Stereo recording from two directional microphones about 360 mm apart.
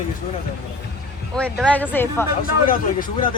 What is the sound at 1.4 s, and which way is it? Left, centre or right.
Speech, centre.